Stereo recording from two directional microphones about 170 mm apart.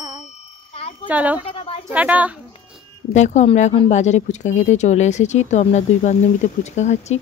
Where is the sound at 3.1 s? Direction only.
45° left (ahead or behind).